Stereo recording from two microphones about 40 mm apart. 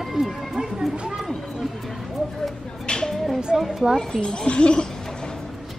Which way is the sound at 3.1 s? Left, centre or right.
Centre.